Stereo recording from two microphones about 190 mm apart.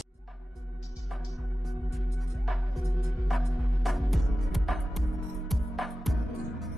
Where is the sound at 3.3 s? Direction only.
Centre (ahead or behind).